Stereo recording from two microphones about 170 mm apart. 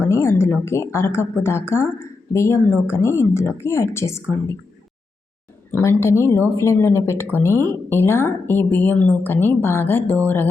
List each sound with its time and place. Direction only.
0.0 s a woman's voice: 15° left (ahead or behind)
5.7 s a woman's voice: 15° left (ahead or behind)